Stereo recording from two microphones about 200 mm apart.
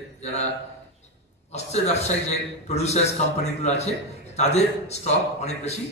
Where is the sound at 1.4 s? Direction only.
35° left (ahead or behind).